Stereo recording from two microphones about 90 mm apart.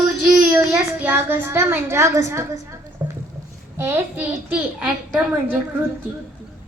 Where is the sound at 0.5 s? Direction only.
20° right (ahead or behind).